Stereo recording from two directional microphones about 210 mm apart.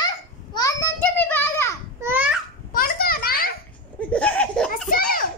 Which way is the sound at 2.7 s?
45° left (ahead or behind).